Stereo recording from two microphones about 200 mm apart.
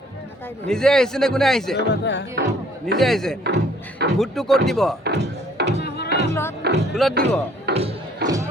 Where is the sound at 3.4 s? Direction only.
55° right (ahead or behind).